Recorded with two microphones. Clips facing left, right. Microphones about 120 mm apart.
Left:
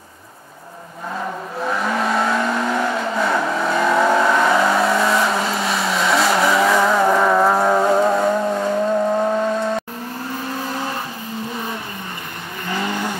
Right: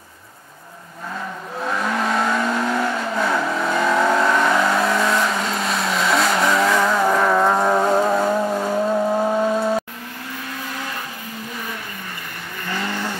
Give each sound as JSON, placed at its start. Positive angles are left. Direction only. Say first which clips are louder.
{"t": 1.6, "sound": "vehicle", "louder": "left 1 dB", "side_deg": 5}
{"t": 10.7, "sound": "vehicle", "louder": "left 5 dB", "side_deg": 30}
{"t": 12.6, "sound": "vehicle", "louder": "left 3 dB", "side_deg": 15}